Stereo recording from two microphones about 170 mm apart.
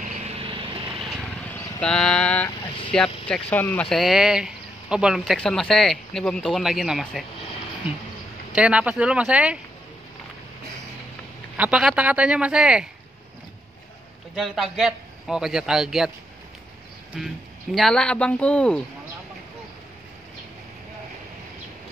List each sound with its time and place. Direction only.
0.4 s vehicle: 30° right (ahead or behind)
1.5 s speech: 5° left (ahead or behind)
3.9 s speech: centre (ahead or behind)
8.5 s speech: 5° right (ahead or behind)
11.5 s speech: 5° right (ahead or behind)
14.3 s speech: centre (ahead or behind)
17.1 s speech: centre (ahead or behind)